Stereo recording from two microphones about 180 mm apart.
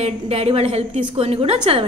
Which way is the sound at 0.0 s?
35° right (ahead or behind).